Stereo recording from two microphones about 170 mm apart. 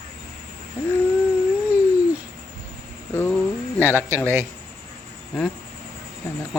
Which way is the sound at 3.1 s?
10° left (ahead or behind).